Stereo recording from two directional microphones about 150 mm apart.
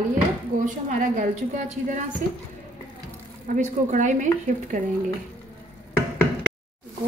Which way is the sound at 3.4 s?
55° right (ahead or behind).